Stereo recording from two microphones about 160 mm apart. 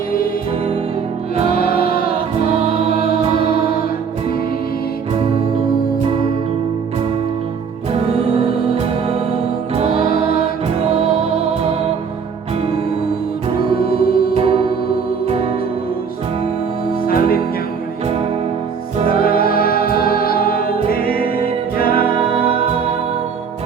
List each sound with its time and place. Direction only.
1.5 s music: 65° left (ahead or behind)
8.4 s music: 40° right (ahead or behind)
10.0 s music: 70° left (ahead or behind)
13.7 s music: 70° left (ahead or behind)
14.3 s music: 35° right (ahead or behind)
17.1 s music: 65° left (ahead or behind)
19.0 s music: 65° left (ahead or behind)